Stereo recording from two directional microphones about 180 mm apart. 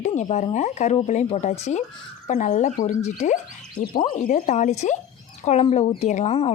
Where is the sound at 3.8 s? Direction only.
50° left (ahead or behind).